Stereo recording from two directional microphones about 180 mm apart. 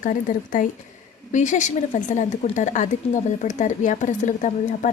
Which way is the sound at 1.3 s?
40° left (ahead or behind).